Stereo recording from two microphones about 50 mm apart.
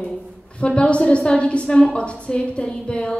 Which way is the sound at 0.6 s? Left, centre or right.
Left.